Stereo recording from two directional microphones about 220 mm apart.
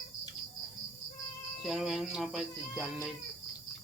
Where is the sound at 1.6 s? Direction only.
Centre (ahead or behind).